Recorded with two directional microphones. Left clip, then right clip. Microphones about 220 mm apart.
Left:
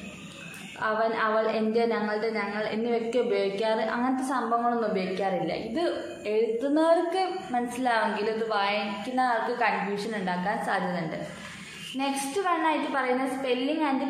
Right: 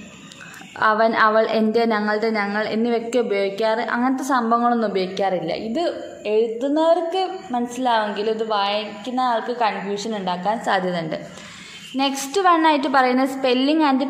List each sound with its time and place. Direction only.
0.7 s a woman's voice: 40° right (ahead or behind)
12.0 s a woman's voice: 45° right (ahead or behind)